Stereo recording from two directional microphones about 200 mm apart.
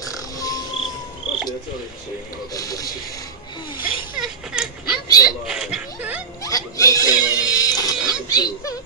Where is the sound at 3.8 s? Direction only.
45° left (ahead or behind).